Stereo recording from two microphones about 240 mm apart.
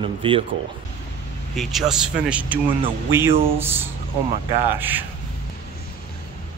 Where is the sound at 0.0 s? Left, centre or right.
Right.